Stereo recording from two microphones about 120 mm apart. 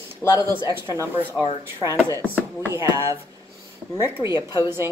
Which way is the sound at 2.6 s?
25° right (ahead or behind).